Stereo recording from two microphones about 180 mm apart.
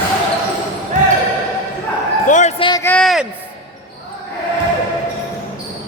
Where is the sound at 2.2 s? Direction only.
45° left (ahead or behind).